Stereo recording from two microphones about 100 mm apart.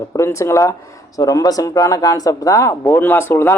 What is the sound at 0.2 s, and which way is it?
A man's voice, 30° left (ahead or behind).